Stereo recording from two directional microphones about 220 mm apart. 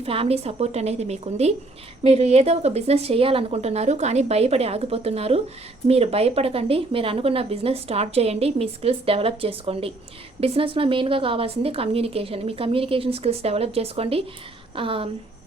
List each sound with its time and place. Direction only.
0.0 s speech: 25° right (ahead or behind)